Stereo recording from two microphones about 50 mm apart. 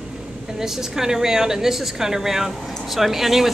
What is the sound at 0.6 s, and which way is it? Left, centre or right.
A woman's voice, centre.